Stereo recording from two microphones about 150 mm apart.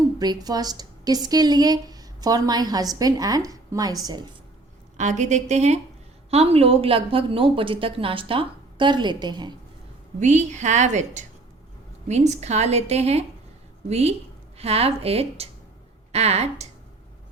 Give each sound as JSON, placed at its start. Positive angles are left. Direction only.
{"t": 0.2, "sound": "speech", "side_deg": -25}
{"t": 4.9, "sound": "a woman's voice", "side_deg": -55}
{"t": 10.2, "sound": "a woman's voice", "side_deg": -50}